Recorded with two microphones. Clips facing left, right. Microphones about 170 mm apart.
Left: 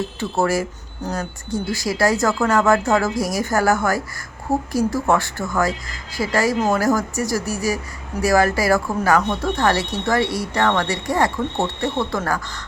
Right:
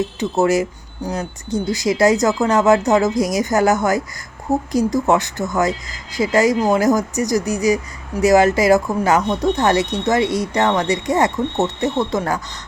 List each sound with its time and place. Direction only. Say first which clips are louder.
0.2 s speech: right 4 dB; 20° right (ahead or behind)